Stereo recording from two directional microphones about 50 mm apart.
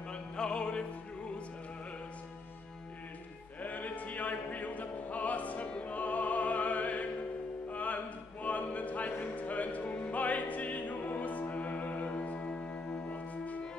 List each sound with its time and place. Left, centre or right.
0.1 s music: centre
3.6 s music: left